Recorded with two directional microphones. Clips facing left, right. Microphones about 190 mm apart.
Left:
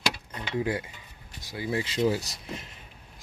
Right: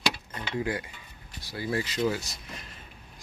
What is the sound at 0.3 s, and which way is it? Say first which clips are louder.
Cutlery: left 2 dB; 20° left (ahead or behind).